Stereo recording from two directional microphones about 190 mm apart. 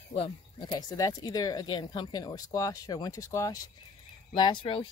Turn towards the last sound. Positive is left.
turn(degrees=25)  # may be behind; listen again after turning